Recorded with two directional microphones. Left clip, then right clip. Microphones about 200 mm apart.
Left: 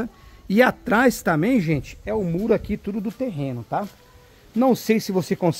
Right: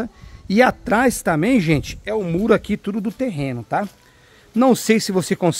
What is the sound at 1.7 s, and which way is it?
Speech, 40° right (ahead or behind).